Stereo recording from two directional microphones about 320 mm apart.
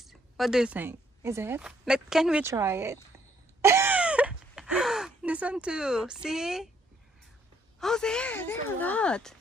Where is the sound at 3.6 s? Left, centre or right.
Centre.